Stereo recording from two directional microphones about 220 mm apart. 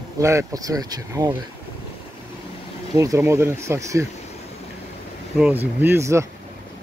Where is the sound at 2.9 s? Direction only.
15° right (ahead or behind).